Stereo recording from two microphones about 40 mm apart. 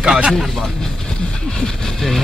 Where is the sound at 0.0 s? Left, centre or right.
Right.